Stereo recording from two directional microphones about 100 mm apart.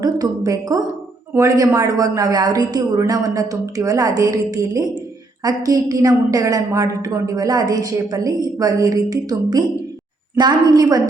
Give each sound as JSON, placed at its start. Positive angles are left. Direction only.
{"t": 0.0, "sound": "a woman's voice", "side_deg": -35}